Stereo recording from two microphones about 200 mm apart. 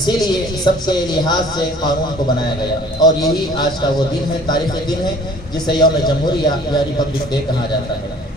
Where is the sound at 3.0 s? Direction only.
20° left (ahead or behind).